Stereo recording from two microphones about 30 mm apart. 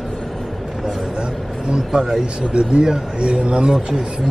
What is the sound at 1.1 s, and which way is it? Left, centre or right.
Vehicle, right.